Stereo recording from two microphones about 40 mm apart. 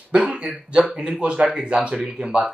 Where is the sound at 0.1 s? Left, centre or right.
Right.